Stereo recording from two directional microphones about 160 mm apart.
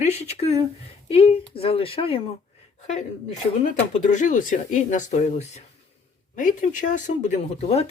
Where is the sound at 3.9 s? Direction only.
50° left (ahead or behind).